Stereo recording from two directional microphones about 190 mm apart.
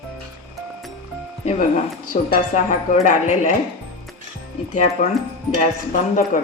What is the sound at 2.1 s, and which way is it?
A woman's voice, 40° left (ahead or behind).